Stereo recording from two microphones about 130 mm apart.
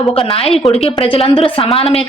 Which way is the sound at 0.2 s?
50° left (ahead or behind).